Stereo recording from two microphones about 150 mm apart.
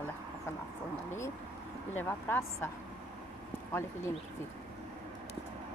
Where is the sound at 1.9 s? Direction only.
15° left (ahead or behind).